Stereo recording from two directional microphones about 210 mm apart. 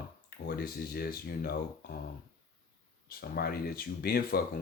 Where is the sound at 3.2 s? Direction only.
45° left (ahead or behind).